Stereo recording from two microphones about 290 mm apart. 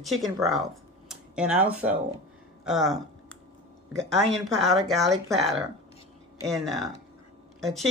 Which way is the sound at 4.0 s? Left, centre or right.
Centre.